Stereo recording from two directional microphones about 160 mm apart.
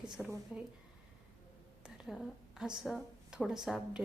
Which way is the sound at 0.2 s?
Centre (ahead or behind).